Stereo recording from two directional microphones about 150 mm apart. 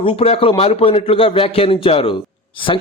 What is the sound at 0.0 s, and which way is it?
A man's voice, 40° left (ahead or behind).